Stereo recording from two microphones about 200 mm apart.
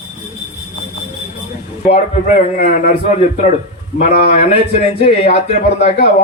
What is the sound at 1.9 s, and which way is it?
A man's voice, 30° left (ahead or behind).